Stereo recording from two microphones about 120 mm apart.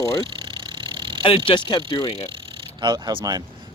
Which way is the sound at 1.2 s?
45° left (ahead or behind).